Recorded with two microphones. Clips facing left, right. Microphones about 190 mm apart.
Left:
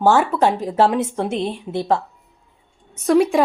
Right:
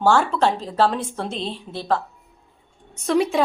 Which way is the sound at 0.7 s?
20° left (ahead or behind).